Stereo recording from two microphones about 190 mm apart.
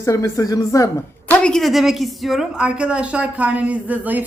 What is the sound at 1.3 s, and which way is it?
A woman's voice, 5° left (ahead or behind).